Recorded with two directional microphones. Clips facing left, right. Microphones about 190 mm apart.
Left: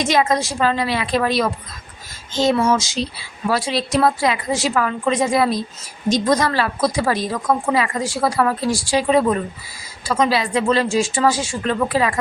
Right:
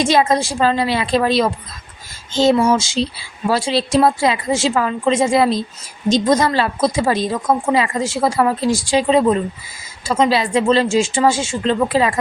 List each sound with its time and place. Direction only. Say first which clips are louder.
0.0 s a woman's voice: right 3 dB; 30° right (ahead or behind)